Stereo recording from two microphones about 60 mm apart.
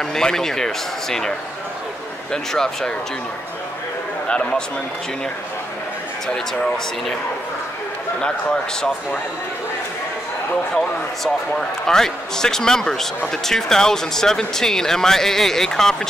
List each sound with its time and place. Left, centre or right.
0.1 s speech: centre
2.3 s speech: centre
4.3 s speech: centre
6.2 s speech: centre
10.7 s speech: centre